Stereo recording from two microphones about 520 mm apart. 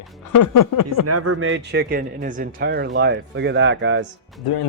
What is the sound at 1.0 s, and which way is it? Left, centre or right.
Speech, right.